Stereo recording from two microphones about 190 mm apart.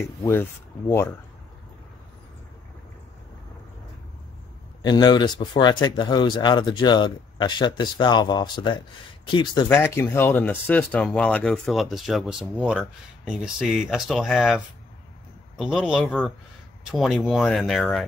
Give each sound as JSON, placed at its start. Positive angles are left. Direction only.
{"t": 0.2, "sound": "speech", "side_deg": 10}
{"t": 4.8, "sound": "speech", "side_deg": 20}
{"t": 9.7, "sound": "speech", "side_deg": 10}